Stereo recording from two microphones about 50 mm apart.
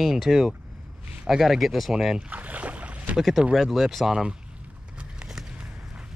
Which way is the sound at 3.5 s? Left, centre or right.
Centre.